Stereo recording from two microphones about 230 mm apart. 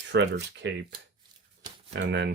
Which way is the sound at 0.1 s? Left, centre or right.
Right.